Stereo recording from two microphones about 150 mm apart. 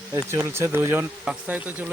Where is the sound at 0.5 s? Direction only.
15° right (ahead or behind).